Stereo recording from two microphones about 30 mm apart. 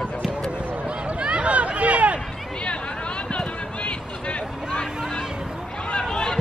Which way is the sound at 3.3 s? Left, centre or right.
Left.